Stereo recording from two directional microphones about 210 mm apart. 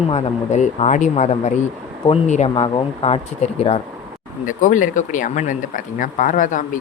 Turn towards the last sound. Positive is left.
turn(degrees=40)  # may be behind; listen again after turning